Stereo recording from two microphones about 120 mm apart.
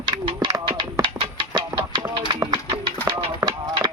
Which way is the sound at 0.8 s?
45° right (ahead or behind).